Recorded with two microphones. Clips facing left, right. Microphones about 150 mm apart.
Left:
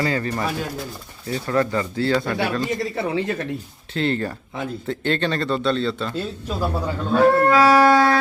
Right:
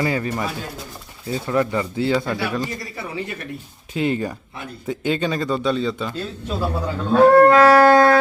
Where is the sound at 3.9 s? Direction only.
10° right (ahead or behind).